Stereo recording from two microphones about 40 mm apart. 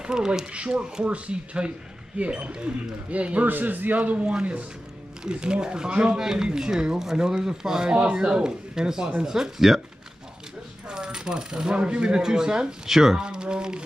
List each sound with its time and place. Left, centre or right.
0.0 s speech: right
0.5 s speech: right
3.4 s a man's voice: right
6.1 s speech: centre
7.9 s speech: right
8.3 s speech: centre
10.9 s coin: centre
12.2 s speech: centre
12.8 s speech: centre
13.2 s speech: right